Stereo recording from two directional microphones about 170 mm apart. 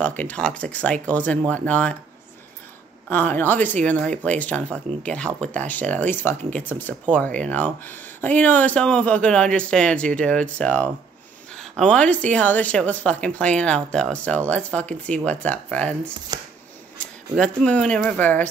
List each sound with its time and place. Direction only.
0.0 s a woman's voice: 10° left (ahead or behind)
3.1 s a woman's voice: 10° left (ahead or behind)
16.3 s a sound: 20° right (ahead or behind)
17.0 s a woman's voice: 5° left (ahead or behind)